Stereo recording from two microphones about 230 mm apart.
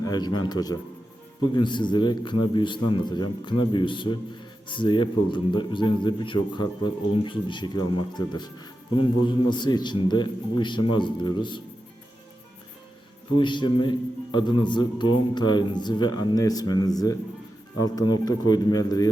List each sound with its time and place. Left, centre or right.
0.0 s a man's voice: centre
13.4 s a man's voice: left